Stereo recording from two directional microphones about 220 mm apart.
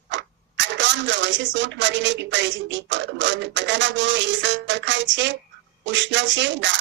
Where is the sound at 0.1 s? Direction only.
55° right (ahead or behind).